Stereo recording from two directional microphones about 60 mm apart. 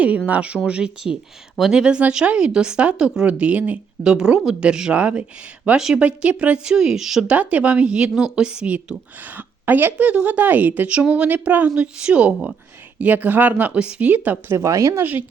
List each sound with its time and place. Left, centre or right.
0.3 s speech: right
4.0 s speech: centre
6.7 s speech: centre
7.3 s speech: right
11.7 s speech: centre
14.5 s speech: right